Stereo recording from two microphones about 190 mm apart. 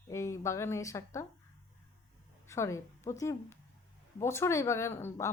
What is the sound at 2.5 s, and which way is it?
A woman's voice, 15° left (ahead or behind).